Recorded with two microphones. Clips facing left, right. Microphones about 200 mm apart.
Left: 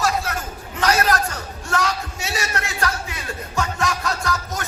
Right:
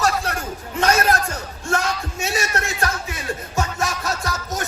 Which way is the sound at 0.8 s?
25° right (ahead or behind).